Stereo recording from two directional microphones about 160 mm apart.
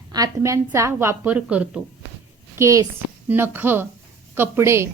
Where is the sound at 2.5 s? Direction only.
20° right (ahead or behind).